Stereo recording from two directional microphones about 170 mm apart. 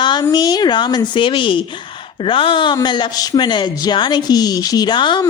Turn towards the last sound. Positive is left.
turn(degrees=25)  # may be behind; listen again after turning